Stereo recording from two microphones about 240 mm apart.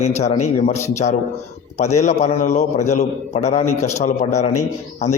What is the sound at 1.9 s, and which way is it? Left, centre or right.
A man's voice, left.